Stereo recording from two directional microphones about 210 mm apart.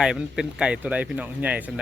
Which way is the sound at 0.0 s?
5° right (ahead or behind).